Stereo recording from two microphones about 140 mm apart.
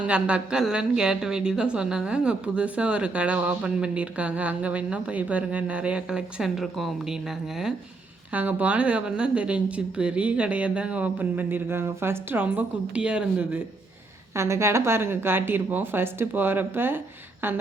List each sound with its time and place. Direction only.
0.1 s a woman's voice: 10° right (ahead or behind)
14.3 s a woman's voice: 20° right (ahead or behind)